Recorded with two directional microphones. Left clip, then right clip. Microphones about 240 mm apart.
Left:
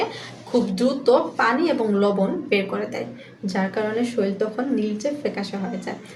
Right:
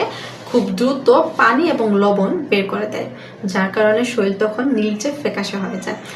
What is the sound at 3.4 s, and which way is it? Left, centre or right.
A woman's voice, centre.